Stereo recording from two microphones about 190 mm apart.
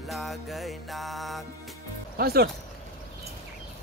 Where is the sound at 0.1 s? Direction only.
Centre (ahead or behind).